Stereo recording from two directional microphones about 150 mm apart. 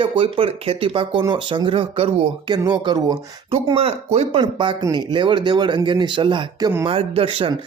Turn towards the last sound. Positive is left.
turn(degrees=-35)  # may be behind; listen again after turning